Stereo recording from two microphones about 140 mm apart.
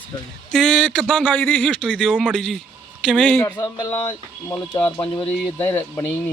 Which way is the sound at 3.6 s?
30° left (ahead or behind).